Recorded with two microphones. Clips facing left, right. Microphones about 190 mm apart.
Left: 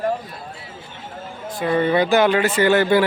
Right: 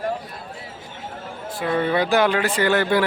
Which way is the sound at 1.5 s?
Centre (ahead or behind).